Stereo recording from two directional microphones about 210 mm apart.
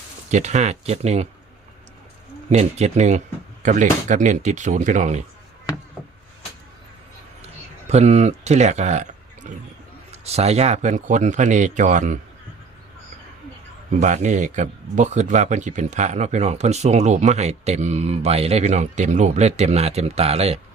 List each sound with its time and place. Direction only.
0.3 s speech: 35° right (ahead or behind)
2.5 s speech: 30° right (ahead or behind)
7.4 s a sound: 30° right (ahead or behind)
10.1 s speech: 30° right (ahead or behind)
14.0 s speech: 35° right (ahead or behind)